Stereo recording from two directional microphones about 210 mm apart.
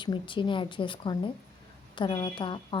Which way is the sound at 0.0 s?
25° left (ahead or behind).